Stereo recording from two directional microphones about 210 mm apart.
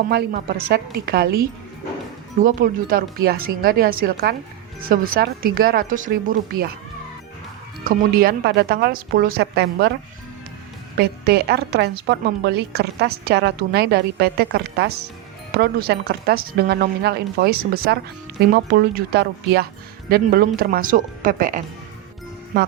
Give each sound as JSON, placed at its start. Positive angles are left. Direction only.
{"t": 0.1, "sound": "a woman's voice", "side_deg": -50}
{"t": 7.9, "sound": "a woman's voice", "side_deg": -45}
{"t": 10.9, "sound": "a woman's voice", "side_deg": -50}